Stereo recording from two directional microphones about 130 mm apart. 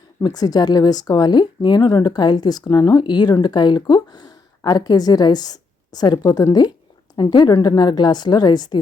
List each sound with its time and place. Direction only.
0.2 s speech: 30° left (ahead or behind)